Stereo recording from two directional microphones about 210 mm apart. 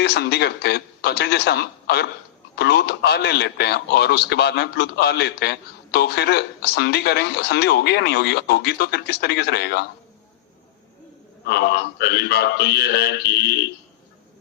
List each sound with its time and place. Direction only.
0.0 s speech: 50° left (ahead or behind)
11.4 s speech: 55° left (ahead or behind)